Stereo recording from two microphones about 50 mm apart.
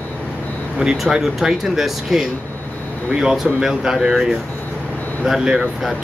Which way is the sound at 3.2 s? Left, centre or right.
Centre.